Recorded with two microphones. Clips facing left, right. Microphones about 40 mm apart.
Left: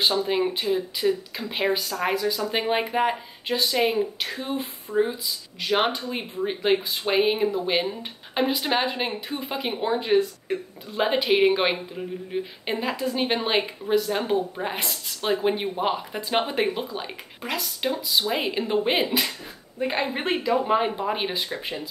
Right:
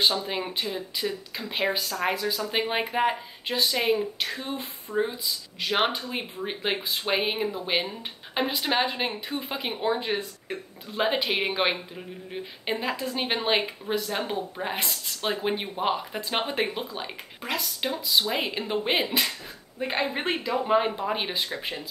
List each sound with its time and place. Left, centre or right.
0.2 s speech: centre